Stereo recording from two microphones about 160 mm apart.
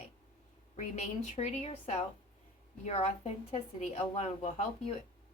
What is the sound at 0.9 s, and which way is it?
A woman's voice, 45° left (ahead or behind).